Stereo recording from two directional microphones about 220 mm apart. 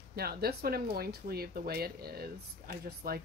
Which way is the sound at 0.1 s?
45° right (ahead or behind).